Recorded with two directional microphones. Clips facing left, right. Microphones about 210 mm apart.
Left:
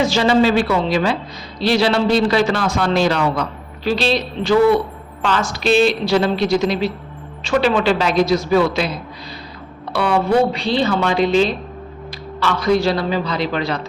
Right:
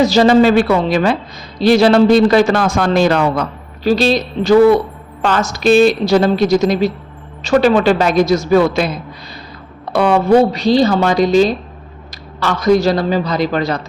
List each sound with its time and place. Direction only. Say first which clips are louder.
0.0 s a man's voice: right 5 dB; 40° right (ahead or behind)
9.9 s a woman's voice: right 5 dB; 50° right (ahead or behind)